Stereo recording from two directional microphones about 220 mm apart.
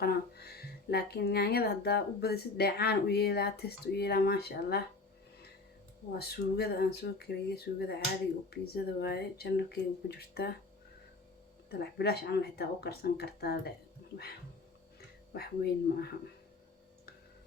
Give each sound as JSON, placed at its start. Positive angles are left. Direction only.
{"t": 0.0, "sound": "speech", "side_deg": 45}
{"t": 6.1, "sound": "speech", "side_deg": 45}
{"t": 11.7, "sound": "speech", "side_deg": 45}
{"t": 15.3, "sound": "speech", "side_deg": 45}